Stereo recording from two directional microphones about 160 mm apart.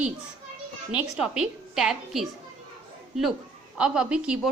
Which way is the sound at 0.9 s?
5° right (ahead or behind).